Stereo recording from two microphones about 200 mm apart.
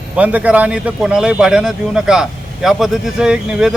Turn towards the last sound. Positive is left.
turn(degrees=-5)  # may be behind; listen again after turning